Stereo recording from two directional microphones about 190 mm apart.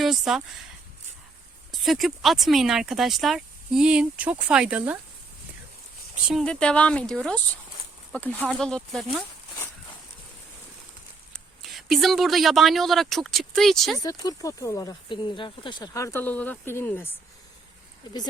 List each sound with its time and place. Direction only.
0.0 s speech: centre (ahead or behind)
1.7 s speech: centre (ahead or behind)
6.2 s speech: centre (ahead or behind)
11.3 s speech: centre (ahead or behind)
14.0 s speech: 20° left (ahead or behind)